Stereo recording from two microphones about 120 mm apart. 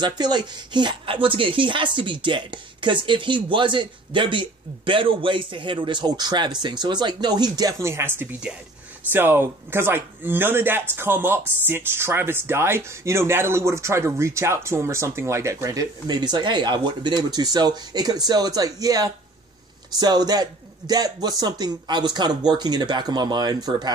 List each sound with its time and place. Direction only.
0.0 s speech: 35° right (ahead or behind)